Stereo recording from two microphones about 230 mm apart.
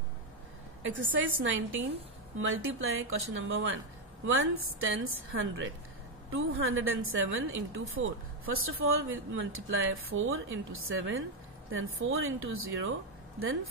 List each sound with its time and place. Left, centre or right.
0.8 s a woman's voice: right